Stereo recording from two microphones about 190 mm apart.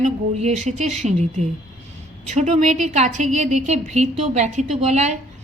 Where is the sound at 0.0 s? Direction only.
35° right (ahead or behind).